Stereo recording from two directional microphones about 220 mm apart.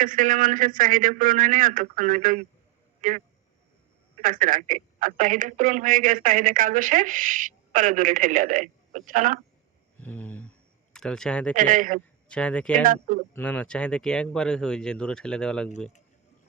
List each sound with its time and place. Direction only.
0.0 s a woman's voice: 35° right (ahead or behind)
10.0 s speech: 5° left (ahead or behind)
11.5 s a woman's voice: 40° right (ahead or behind)
12.3 s speech: 5° left (ahead or behind)
12.8 s a woman's voice: 40° right (ahead or behind)
13.3 s speech: 5° left (ahead or behind)